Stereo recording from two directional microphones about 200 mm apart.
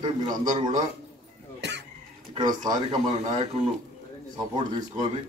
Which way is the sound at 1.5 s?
65° right (ahead or behind).